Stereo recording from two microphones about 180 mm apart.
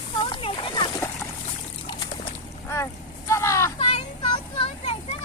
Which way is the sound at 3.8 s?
30° left (ahead or behind).